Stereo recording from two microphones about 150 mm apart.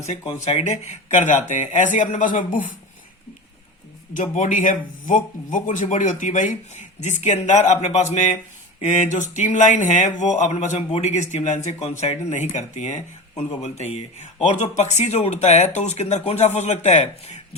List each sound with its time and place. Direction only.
0.4 s speech: 50° left (ahead or behind)
4.1 s speech: 60° left (ahead or behind)